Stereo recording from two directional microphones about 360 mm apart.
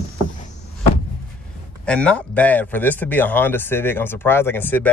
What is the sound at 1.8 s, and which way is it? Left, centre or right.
Speech, centre.